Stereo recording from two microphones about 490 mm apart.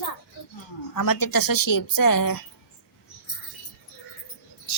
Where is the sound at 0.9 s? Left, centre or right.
Left.